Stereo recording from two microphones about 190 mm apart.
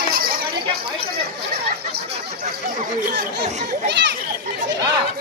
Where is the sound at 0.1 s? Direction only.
50° right (ahead or behind).